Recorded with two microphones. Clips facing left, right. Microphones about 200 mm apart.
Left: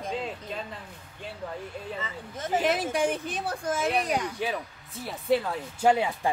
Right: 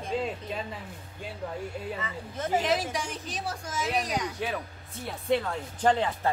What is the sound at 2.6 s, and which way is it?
A woman's voice, 55° left (ahead or behind).